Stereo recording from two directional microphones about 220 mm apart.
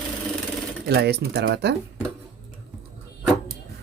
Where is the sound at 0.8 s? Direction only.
50° right (ahead or behind).